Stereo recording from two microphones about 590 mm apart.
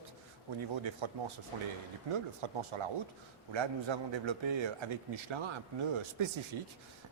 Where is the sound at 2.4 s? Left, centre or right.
Right.